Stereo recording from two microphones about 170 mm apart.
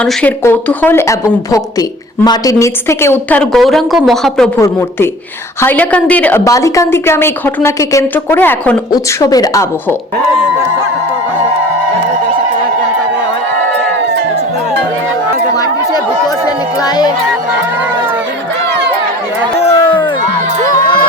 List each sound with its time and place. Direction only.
0.0 s a woman's voice: 10° left (ahead or behind)
2.2 s a woman's voice: 20° left (ahead or behind); by 4.4 s centre (ahead or behind)
4.5 s a woman's voice: 15° left (ahead or behind)
8.9 s speech: 20° left (ahead or behind)
19.5 s a sound: 35° left (ahead or behind)